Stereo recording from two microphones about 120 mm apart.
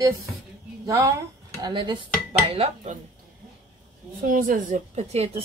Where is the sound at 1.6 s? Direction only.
40° right (ahead or behind).